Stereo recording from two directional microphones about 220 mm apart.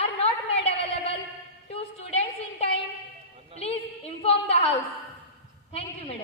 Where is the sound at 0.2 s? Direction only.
25° left (ahead or behind).